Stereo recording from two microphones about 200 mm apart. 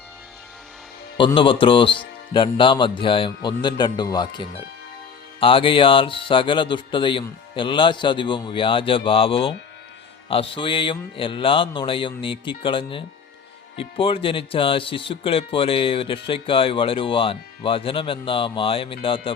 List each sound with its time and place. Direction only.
1.2 s speech: 25° left (ahead or behind)